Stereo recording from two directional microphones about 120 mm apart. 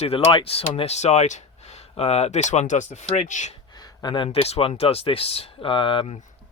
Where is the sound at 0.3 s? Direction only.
50° left (ahead or behind); by 3.5 s 85° left.